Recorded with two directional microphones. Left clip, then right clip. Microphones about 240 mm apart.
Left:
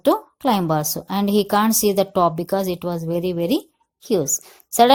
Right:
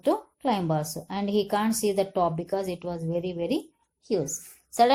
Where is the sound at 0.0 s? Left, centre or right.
Left.